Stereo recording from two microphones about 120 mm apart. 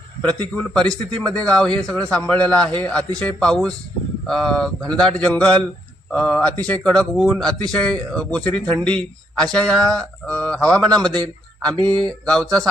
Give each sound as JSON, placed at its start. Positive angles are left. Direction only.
{"t": 0.2, "sound": "a man's voice", "side_deg": 10}